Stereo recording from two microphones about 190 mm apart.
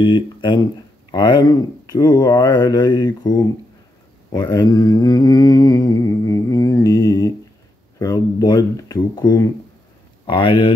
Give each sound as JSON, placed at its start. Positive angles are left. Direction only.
{"t": 0.0, "sound": "speech", "side_deg": 25}